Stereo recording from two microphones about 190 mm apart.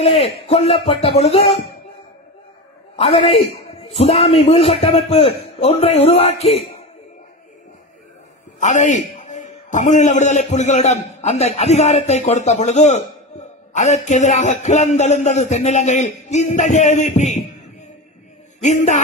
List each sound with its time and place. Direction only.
0.0 s a man's voice: 35° left (ahead or behind)
3.0 s a man's voice: 30° left (ahead or behind)
8.5 s a man's voice: 40° left (ahead or behind)
18.6 s a man's voice: 40° left (ahead or behind)